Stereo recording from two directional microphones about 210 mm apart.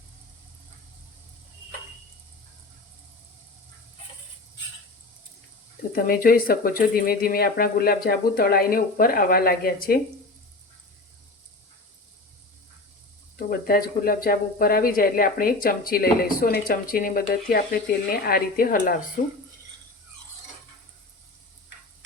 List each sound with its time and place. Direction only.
5.9 s speech: 45° left (ahead or behind)
13.5 s speech: 45° left (ahead or behind)